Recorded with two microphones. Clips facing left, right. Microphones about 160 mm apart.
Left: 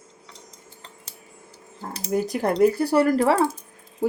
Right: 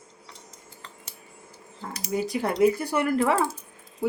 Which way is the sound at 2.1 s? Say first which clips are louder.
Left 4 dB; 45° left (ahead or behind).